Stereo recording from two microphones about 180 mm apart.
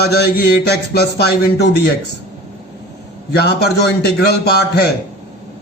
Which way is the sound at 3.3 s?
60° left (ahead or behind).